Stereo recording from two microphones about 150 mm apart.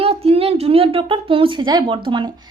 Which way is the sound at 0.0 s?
40° right (ahead or behind).